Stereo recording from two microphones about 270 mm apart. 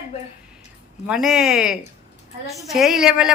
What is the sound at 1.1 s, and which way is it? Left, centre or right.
Speech, centre.